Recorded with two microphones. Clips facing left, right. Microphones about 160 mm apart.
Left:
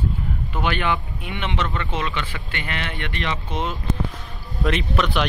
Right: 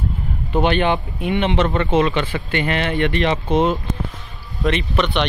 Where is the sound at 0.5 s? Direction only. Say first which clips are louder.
Right 7 dB; 25° right (ahead or behind).